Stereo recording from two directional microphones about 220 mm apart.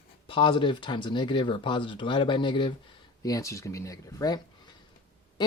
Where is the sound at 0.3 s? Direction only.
25° left (ahead or behind).